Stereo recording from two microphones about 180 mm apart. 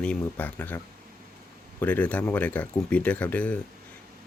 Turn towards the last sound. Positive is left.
turn(degrees=5)  # may be behind; listen again after turning